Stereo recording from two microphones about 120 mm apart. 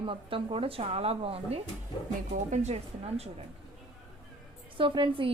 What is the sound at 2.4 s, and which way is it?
Speech, 80° right.